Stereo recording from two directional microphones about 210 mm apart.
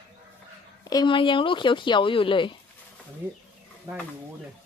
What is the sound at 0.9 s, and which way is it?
Speech, 20° left (ahead or behind).